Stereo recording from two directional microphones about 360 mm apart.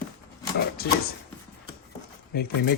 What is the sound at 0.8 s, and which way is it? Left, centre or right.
Speech, left.